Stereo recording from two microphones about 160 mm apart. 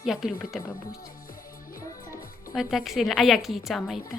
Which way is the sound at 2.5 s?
Centre (ahead or behind).